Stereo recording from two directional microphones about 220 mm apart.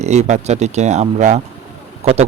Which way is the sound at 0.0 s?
30° right (ahead or behind).